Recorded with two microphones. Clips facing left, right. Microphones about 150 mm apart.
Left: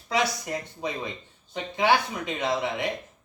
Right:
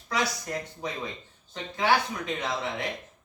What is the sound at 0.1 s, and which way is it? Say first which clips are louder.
Speech: left 3 dB; 15° left (ahead or behind).